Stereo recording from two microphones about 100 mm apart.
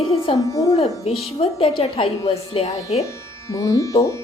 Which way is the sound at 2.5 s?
90° left.